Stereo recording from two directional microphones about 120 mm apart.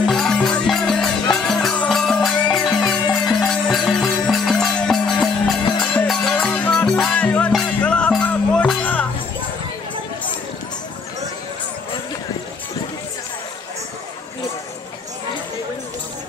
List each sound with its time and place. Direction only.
0.0 s music: 5° left (ahead or behind)